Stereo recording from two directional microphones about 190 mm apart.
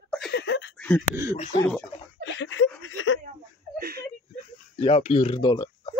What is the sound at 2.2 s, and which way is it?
Chuckle, 75° left (ahead or behind).